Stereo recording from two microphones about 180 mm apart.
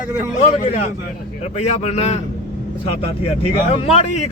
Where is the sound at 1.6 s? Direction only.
35° left (ahead or behind).